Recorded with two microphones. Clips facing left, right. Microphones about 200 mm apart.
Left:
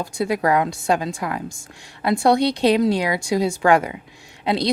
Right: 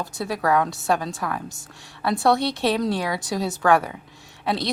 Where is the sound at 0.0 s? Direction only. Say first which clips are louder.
Left 4 dB; 15° left (ahead or behind).